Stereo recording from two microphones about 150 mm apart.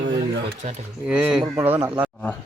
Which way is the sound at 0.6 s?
55° right (ahead or behind).